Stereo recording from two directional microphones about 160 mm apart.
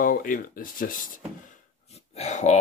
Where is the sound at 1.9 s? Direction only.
40° left (ahead or behind).